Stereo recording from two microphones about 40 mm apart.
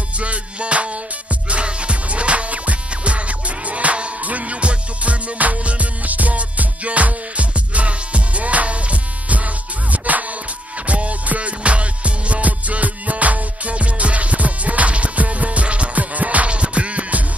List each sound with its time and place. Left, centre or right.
0.2 s music: right